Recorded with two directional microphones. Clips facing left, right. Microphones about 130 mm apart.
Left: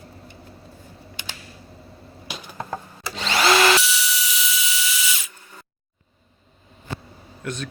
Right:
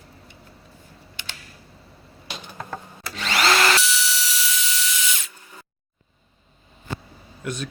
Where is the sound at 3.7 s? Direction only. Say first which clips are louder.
Left 1 dB; 5° left (ahead or behind).